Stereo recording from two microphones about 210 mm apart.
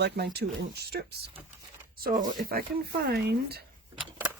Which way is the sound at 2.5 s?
50° right (ahead or behind).